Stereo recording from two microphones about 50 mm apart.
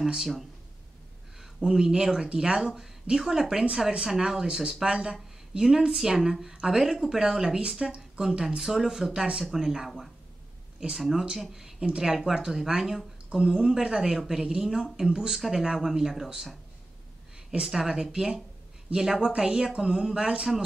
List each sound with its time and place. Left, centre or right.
0.0 s a woman's voice: centre
1.4 s a woman's voice: centre
17.5 s a woman's voice: centre